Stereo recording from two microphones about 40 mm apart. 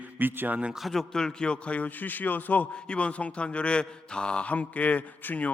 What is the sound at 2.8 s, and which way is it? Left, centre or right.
Speech, left.